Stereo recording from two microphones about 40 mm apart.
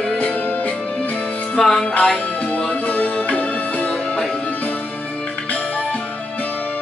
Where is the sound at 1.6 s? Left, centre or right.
Centre.